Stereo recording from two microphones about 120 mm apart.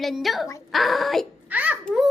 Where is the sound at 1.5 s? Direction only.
10° right (ahead or behind).